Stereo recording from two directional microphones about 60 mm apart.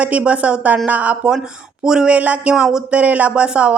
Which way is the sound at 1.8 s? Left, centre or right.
Centre.